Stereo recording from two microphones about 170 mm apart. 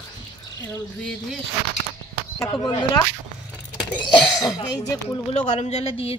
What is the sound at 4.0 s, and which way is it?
Speech, 20° left (ahead or behind).